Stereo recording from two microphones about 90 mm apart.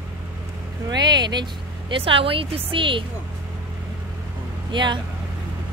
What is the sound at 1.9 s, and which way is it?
Speech, 85° right.